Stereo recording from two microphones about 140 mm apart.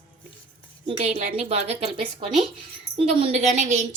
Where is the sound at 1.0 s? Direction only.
50° right (ahead or behind).